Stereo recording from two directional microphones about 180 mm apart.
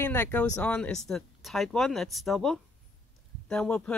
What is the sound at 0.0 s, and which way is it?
Speech, 10° left (ahead or behind).